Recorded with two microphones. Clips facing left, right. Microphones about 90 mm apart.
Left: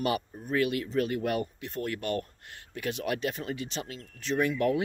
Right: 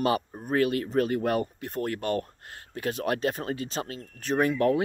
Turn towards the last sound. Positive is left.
turn(degrees=-40)  # may be behind; listen again after turning